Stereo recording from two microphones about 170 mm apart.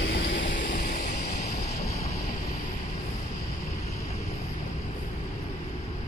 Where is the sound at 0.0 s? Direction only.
90° left.